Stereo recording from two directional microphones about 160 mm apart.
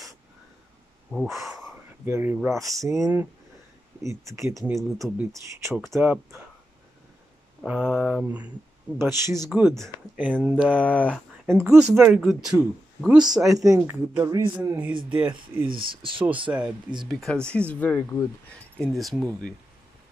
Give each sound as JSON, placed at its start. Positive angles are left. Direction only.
{"t": 1.1, "sound": "speech", "side_deg": 0}
{"t": 2.0, "sound": "speech", "side_deg": -15}
{"t": 4.7, "sound": "speech", "side_deg": 0}
{"t": 5.3, "sound": "speech", "side_deg": -20}
{"t": 7.6, "sound": "speech", "side_deg": -10}
{"t": 9.5, "sound": "speech", "side_deg": -5}
{"t": 10.8, "sound": "speech", "side_deg": 10}
{"t": 11.6, "sound": "speech", "side_deg": -5}
{"t": 13.7, "sound": "speech", "side_deg": -15}
{"t": 15.0, "sound": "speech", "side_deg": -10}
{"t": 15.6, "sound": "speech", "side_deg": -30}
{"t": 16.4, "sound": "speech", "side_deg": -10}
{"t": 17.1, "sound": "speech", "side_deg": 0}
{"t": 18.9, "sound": "speech", "side_deg": 0}